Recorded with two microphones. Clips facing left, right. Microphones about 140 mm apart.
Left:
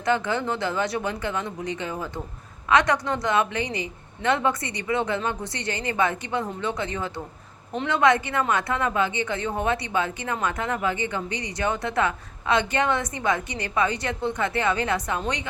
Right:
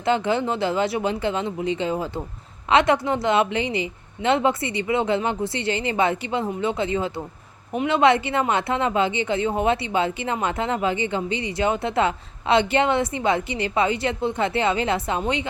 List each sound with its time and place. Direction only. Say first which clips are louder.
0.3 s speech: right 4 dB; 20° right (ahead or behind)